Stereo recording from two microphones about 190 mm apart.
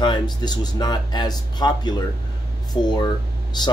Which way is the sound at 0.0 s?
25° left (ahead or behind).